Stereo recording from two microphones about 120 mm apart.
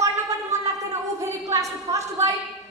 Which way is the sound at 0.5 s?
70° right (ahead or behind).